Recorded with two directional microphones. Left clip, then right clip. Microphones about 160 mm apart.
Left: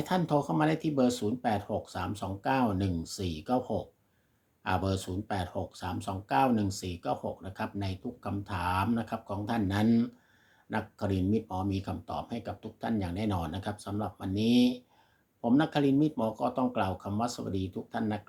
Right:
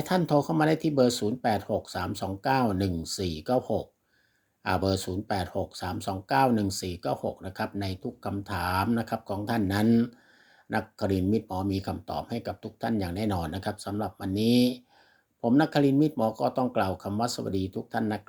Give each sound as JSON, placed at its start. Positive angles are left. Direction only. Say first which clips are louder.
{"t": 0.0, "sound": "speech", "louder": "right 4 dB", "side_deg": -35}